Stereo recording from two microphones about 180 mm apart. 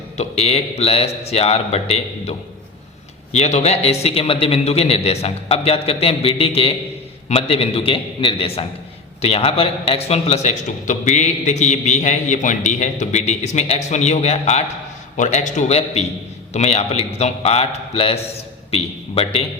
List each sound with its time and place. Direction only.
0.2 s a man's voice: 35° left (ahead or behind)
3.3 s a man's voice: 40° left (ahead or behind)